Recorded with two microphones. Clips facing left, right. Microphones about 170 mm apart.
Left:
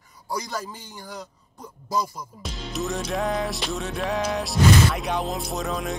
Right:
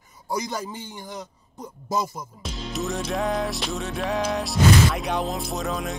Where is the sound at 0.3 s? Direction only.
20° right (ahead or behind).